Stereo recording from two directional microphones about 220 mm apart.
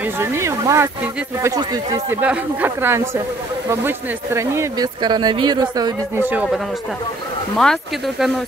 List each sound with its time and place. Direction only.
0.2 s speech: 15° right (ahead or behind)